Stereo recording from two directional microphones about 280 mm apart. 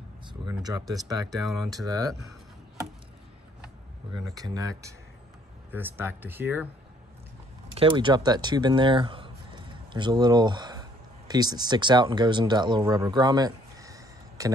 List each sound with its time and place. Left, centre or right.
0.3 s speech: centre
1.3 s speech: centre
4.3 s speech: centre
7.7 s speech: centre